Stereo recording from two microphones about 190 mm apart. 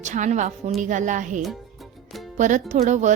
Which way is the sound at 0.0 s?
40° right (ahead or behind).